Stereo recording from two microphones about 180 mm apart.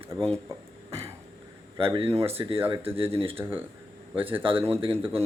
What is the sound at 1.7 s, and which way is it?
Speech, 30° right (ahead or behind).